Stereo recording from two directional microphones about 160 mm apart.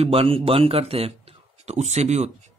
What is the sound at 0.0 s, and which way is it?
A man's voice, 35° right (ahead or behind).